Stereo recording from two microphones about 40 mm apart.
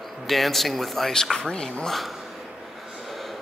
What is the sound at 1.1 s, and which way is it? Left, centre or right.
Speech, centre.